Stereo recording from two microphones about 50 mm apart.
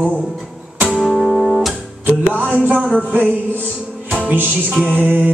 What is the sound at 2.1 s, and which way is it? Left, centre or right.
Music, right.